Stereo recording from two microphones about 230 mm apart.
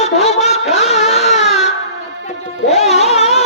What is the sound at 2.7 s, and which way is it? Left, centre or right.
Music, left.